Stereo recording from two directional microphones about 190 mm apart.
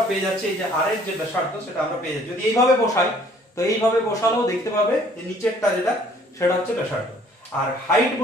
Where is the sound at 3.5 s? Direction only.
15° left (ahead or behind).